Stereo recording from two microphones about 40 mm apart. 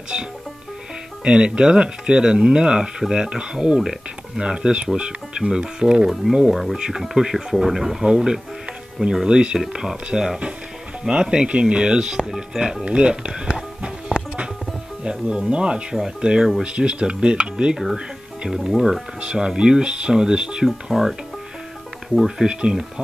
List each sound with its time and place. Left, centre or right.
0.1 s speech: right
6.5 s speech: centre
6.9 s speech: centre
12.8 s music: right
15.0 s speech: right
17.9 s music: right
18.6 s speech: centre
19.2 s speech: centre
20.6 s speech: centre
22.4 s speech: right